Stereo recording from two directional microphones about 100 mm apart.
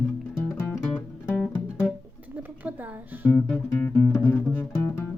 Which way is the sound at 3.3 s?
15° left (ahead or behind).